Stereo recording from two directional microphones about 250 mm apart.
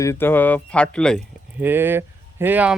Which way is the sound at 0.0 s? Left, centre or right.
Centre.